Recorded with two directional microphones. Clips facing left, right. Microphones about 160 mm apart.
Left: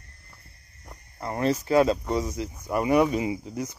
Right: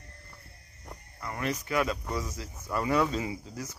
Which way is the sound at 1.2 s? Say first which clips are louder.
Left 8 dB; 30° left (ahead or behind).